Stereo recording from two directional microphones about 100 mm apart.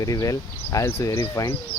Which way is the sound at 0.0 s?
35° left (ahead or behind).